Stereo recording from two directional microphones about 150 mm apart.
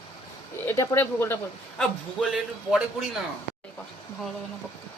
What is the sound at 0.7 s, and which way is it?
Speech, 20° left (ahead or behind).